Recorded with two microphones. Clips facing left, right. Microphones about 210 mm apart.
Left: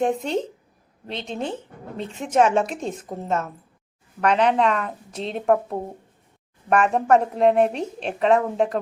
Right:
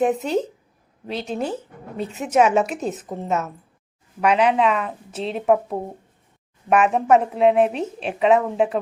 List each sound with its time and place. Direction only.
0.0 s a woman's voice: 5° right (ahead or behind)